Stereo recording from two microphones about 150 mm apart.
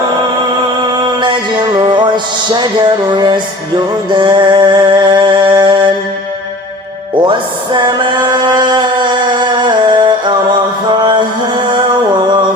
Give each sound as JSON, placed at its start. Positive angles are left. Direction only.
{"t": 1.8, "sound": "music", "side_deg": -30}
{"t": 7.2, "sound": "music", "side_deg": -30}
{"t": 10.8, "sound": "mantra", "side_deg": -30}